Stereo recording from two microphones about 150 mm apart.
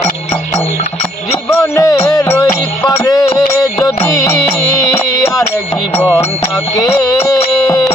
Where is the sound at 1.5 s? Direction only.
20° left (ahead or behind).